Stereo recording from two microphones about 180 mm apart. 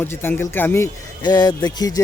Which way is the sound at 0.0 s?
10° left (ahead or behind).